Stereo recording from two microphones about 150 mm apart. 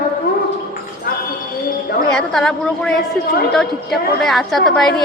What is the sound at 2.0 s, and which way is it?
Speech, 5° left (ahead or behind).